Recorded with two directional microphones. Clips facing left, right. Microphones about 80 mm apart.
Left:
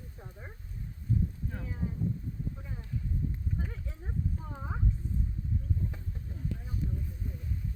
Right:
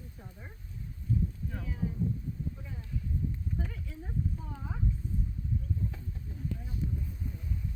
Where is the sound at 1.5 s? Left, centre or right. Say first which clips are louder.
Even; left.